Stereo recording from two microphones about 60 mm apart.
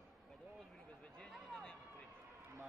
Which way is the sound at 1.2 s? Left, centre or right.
Centre.